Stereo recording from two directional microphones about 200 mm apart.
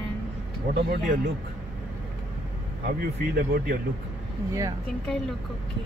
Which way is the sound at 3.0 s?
50° right (ahead or behind).